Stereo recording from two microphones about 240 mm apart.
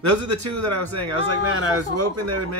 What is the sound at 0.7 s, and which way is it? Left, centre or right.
Speech, right.